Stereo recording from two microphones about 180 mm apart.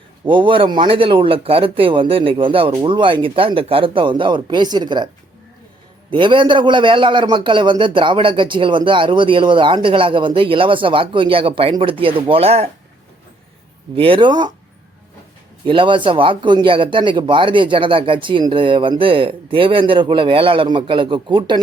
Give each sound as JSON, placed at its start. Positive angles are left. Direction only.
{"t": 0.3, "sound": "a man's voice", "side_deg": -30}
{"t": 6.1, "sound": "a man's voice", "side_deg": -25}
{"t": 13.9, "sound": "a man's voice", "side_deg": -30}
{"t": 15.6, "sound": "a man's voice", "side_deg": -30}